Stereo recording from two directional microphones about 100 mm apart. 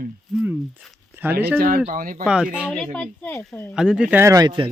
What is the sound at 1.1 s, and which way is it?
Speech, 20° right (ahead or behind).